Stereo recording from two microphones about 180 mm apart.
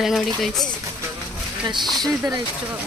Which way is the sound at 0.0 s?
Centre (ahead or behind).